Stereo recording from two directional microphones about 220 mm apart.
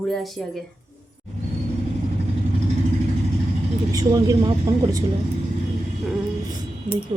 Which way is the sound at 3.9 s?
15° right (ahead or behind).